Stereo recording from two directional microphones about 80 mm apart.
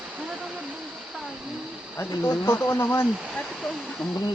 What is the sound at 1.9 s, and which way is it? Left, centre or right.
Speech, left.